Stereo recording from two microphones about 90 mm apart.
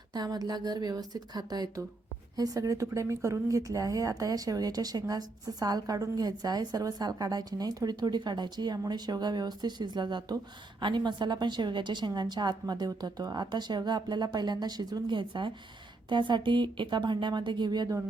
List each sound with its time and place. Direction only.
0.1 s a woman's voice: 45° right (ahead or behind)